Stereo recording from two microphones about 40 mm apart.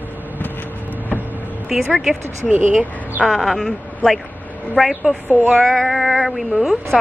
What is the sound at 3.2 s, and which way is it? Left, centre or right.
Speech, centre.